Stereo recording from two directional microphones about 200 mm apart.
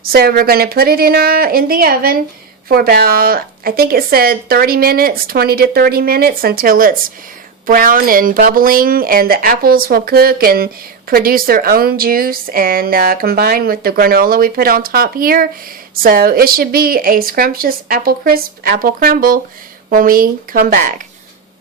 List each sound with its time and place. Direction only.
0.0 s speech: 50° right (ahead or behind)